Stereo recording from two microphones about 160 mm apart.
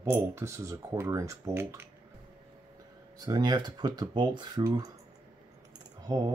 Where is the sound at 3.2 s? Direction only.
25° right (ahead or behind).